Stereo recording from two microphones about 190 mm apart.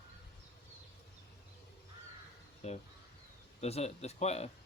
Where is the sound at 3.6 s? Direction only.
35° left (ahead or behind).